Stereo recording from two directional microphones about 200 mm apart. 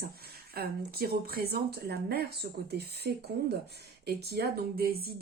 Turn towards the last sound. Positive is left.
turn(degrees=-50)  # may be behind; listen again after turning